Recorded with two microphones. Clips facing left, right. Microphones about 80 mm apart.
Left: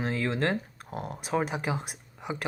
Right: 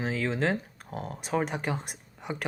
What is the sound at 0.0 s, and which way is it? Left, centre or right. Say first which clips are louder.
Speech: even; centre.